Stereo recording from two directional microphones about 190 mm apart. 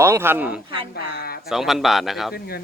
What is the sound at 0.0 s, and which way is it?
Speech, 15° right (ahead or behind).